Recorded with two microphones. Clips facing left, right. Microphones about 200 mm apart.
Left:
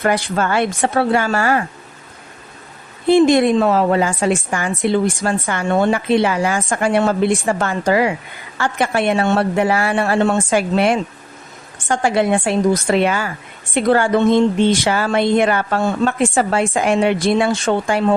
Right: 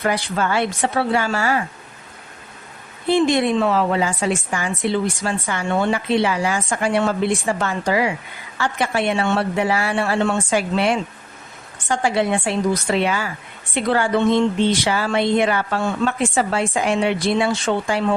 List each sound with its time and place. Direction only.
0.0 s a woman's voice: 50° left (ahead or behind)
3.1 s a woman's voice: 45° left (ahead or behind)